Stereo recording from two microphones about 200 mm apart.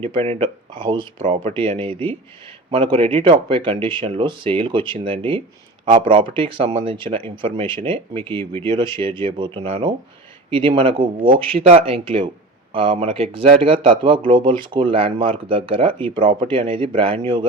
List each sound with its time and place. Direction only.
0.0 s speech: 30° right (ahead or behind)
8.4 s speech: 10° left (ahead or behind)
8.7 s speech: 25° right (ahead or behind)